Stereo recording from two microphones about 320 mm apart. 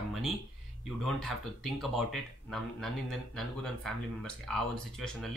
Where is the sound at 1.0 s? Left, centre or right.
Centre.